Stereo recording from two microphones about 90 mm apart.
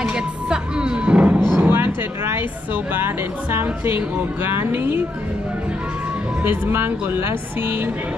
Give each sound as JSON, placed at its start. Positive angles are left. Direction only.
{"t": 0.0, "sound": "music", "side_deg": -10}
{"t": 1.6, "sound": "a sound", "side_deg": -25}
{"t": 2.2, "sound": "speech", "side_deg": -25}
{"t": 6.4, "sound": "speech", "side_deg": -25}